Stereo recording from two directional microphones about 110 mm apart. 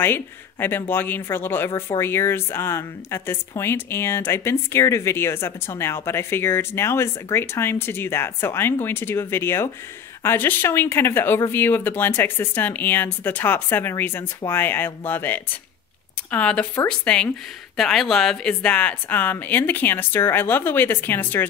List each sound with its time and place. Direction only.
0.0 s speech: 20° left (ahead or behind)